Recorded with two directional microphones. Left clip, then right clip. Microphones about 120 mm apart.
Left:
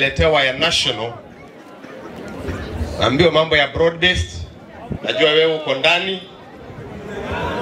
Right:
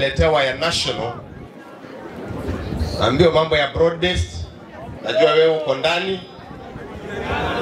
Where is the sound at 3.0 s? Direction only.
35° left (ahead or behind).